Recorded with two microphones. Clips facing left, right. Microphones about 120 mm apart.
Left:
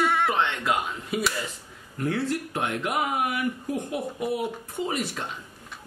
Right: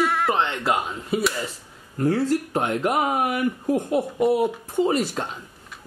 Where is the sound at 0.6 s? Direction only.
30° right (ahead or behind).